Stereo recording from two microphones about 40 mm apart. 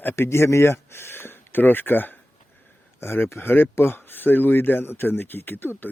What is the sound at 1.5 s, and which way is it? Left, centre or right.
Speech, left.